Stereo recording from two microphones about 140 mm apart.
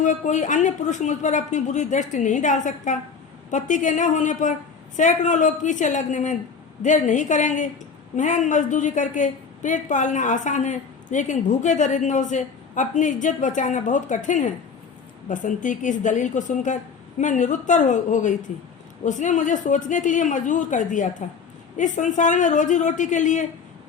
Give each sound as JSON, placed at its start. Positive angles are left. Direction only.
{"t": 0.0, "sound": "a woman's voice", "side_deg": 60}